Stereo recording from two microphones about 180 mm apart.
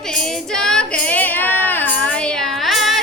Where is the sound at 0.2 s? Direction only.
5° left (ahead or behind).